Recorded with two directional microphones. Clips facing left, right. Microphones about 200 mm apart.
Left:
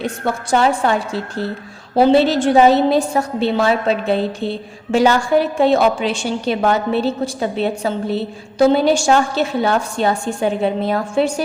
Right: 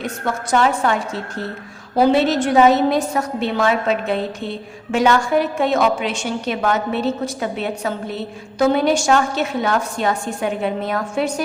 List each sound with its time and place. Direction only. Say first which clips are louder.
0.0 s a woman's voice: left 2 dB; 30° left (ahead or behind)